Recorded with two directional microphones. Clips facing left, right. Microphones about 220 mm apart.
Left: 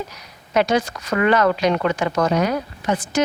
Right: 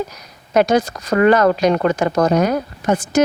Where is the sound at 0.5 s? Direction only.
45° right (ahead or behind).